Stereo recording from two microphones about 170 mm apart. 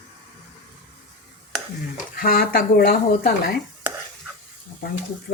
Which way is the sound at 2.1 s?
60° left (ahead or behind).